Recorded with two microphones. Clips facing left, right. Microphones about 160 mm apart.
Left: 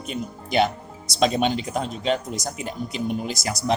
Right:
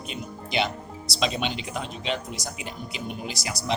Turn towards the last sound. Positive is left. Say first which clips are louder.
# left 6 dB
turn(degrees=45)  # may be behind; listen again after turning